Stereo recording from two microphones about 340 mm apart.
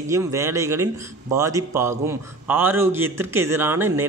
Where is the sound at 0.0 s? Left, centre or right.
Centre.